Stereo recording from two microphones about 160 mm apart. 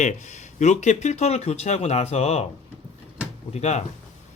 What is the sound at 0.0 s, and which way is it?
A man's voice, 50° left (ahead or behind).